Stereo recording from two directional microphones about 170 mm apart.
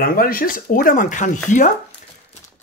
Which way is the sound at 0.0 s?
60° left (ahead or behind).